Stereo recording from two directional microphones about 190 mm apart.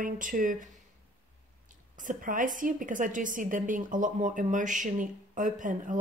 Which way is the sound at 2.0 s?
45° right (ahead or behind).